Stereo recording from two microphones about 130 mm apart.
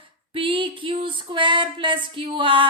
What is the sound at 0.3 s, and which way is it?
Music, 40° right (ahead or behind).